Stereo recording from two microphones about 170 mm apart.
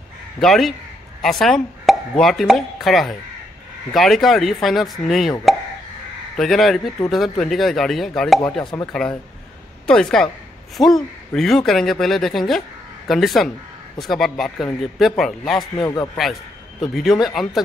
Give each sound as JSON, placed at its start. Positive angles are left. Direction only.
{"t": 0.4, "sound": "speech", "side_deg": 0}
{"t": 6.3, "sound": "speech", "side_deg": 0}
{"t": 15.8, "sound": "speech", "side_deg": 25}
{"t": 16.8, "sound": "speech", "side_deg": 0}